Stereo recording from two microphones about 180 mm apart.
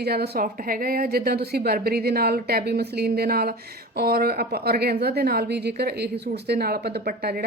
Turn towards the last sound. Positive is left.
turn(degrees=-55)  # may be behind; listen again after turning